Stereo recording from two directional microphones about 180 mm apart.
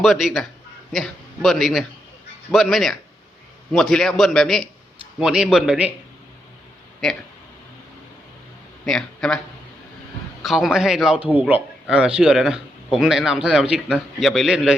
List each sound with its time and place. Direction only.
0.0 s a man's voice: centre (ahead or behind)
8.8 s speech: 5° left (ahead or behind)
10.4 s a man's voice: centre (ahead or behind)